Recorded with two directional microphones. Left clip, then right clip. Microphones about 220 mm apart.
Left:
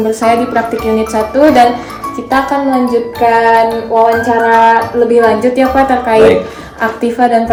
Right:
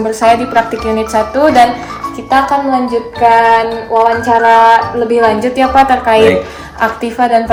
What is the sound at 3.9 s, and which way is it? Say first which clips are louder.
Speech: even; 25° right (ahead or behind).